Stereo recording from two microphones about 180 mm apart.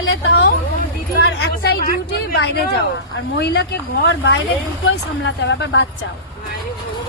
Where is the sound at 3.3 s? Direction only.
75° left (ahead or behind).